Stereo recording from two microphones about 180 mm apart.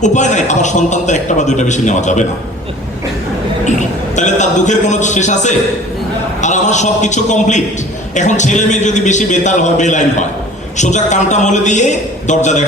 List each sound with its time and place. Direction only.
0.0 s a man's voice: 40° left (ahead or behind)
3.7 s a man's voice: 40° left (ahead or behind)